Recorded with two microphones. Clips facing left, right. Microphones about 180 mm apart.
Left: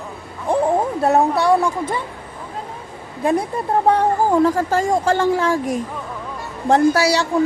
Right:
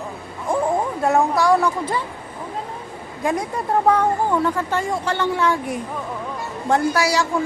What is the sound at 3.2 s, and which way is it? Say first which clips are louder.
Speech: left 4 dB; 30° left (ahead or behind).